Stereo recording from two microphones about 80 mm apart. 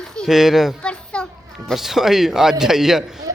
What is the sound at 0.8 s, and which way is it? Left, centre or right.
Children playing, centre.